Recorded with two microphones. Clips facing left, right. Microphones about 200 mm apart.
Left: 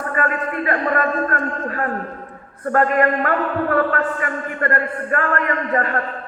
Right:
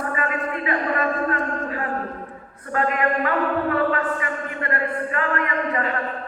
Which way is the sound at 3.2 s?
50° left (ahead or behind).